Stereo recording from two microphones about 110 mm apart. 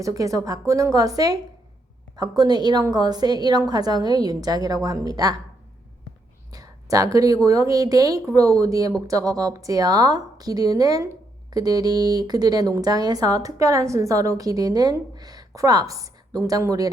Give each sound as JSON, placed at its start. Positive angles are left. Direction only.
{"t": 0.0, "sound": "speech", "side_deg": -30}
{"t": 6.5, "sound": "a sound", "side_deg": -30}
{"t": 7.4, "sound": "speech", "side_deg": -30}